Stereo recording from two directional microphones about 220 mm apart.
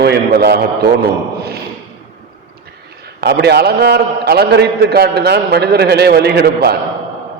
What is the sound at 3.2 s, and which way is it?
A man's voice, 50° right (ahead or behind).